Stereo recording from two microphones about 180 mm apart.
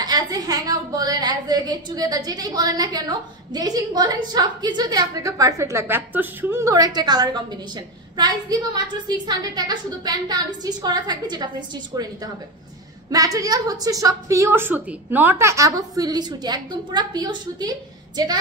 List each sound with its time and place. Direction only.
0.0 s a woman's voice: 20° right (ahead or behind)